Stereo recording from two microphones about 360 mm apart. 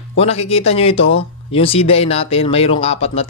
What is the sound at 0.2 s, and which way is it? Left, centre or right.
Speech, centre.